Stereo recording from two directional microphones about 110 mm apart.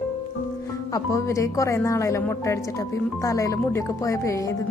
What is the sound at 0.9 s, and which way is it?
Speech, 30° left (ahead or behind).